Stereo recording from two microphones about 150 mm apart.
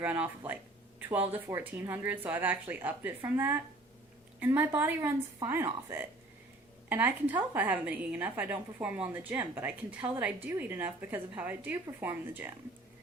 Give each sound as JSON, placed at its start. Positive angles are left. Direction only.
{"t": 0.0, "sound": "a woman's voice", "side_deg": -10}